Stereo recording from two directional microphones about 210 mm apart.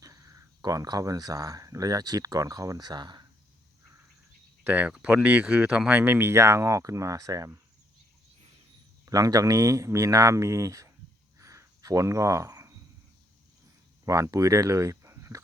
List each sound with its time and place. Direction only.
0.0 s speech: 15° right (ahead or behind)
4.6 s speech: 10° right (ahead or behind)
9.0 s speech: 15° right (ahead or behind)
11.3 s a sound: 15° right (ahead or behind)
14.0 s speech: 15° right (ahead or behind)